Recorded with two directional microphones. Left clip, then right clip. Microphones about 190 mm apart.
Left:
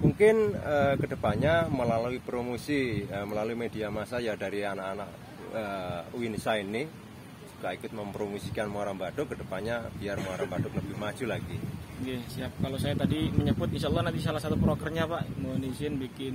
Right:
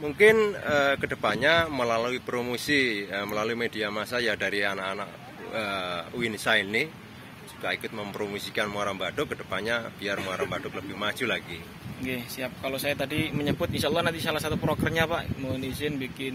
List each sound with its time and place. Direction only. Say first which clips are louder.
0.2 s speech: right 4 dB; 15° left (ahead or behind)
12.1 s speech: right 6 dB; 20° right (ahead or behind)